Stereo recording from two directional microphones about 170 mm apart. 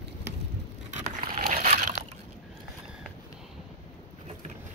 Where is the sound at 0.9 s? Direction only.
45° right (ahead or behind).